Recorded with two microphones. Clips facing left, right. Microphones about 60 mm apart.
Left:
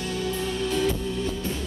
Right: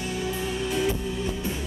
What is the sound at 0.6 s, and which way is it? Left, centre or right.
Music, centre.